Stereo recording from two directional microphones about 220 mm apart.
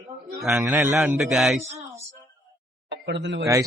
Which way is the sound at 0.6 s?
15° right (ahead or behind).